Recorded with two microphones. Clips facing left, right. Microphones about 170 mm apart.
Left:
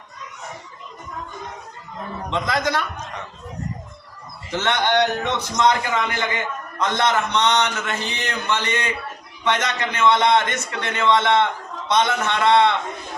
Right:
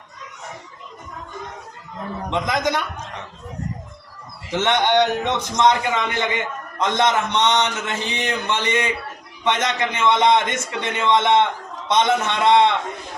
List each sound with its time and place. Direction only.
2.3 s a man's voice: 20° right (ahead or behind)
4.5 s a man's voice: 20° right (ahead or behind)